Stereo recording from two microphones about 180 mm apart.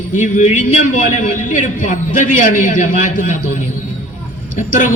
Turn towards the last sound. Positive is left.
turn(degrees=45)  # may be behind; listen again after turning